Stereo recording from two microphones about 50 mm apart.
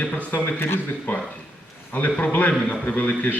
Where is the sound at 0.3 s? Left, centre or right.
Left.